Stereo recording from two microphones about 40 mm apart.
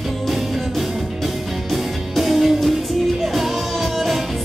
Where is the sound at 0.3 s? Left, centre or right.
Centre.